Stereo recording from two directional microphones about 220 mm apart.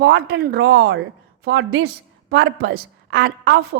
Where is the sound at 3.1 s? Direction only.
65° right (ahead or behind).